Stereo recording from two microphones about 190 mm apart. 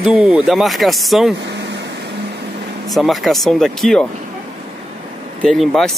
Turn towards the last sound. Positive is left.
turn(degrees=0)  # may be behind; listen again after turning